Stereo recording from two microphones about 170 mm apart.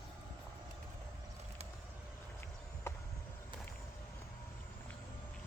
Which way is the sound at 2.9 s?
15° left (ahead or behind).